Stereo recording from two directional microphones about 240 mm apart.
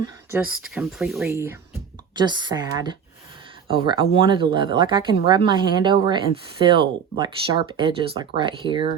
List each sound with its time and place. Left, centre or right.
0.0 s a woman's voice: centre